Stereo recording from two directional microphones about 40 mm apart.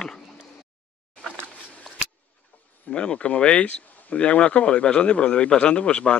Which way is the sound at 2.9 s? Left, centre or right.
Left.